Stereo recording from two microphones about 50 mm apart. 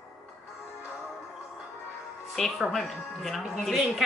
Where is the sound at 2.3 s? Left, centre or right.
Centre.